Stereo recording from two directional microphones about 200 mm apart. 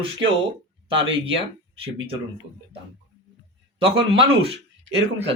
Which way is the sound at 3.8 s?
25° right (ahead or behind).